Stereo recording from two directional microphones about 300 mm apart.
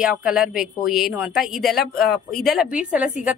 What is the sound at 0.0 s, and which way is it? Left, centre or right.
Speech, centre.